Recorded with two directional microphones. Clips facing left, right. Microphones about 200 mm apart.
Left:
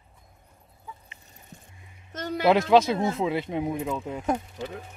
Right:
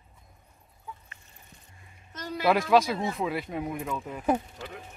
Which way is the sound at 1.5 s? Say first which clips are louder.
Left 10 dB; 45° left (ahead or behind).